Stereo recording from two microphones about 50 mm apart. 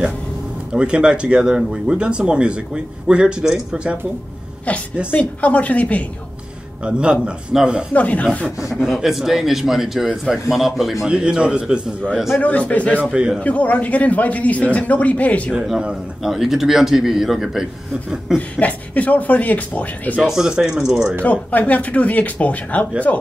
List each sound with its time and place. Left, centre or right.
0.7 s speech: right
4.7 s a man's voice: left
6.8 s speech: centre
7.9 s a man's voice: left
8.5 s a man's voice: centre
11.1 s speech: centre
12.4 s a man's voice: left
13.0 s speech: right
13.4 s a man's voice: left
16.2 s a man's voice: centre
18.6 s a man's voice: left
20.2 s a man's voice: centre
21.2 s a man's voice: left